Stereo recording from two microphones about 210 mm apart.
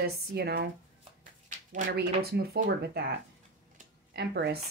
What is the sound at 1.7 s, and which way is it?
Speech, 45° right (ahead or behind).